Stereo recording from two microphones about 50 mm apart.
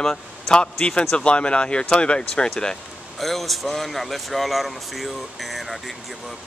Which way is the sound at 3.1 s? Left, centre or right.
Centre.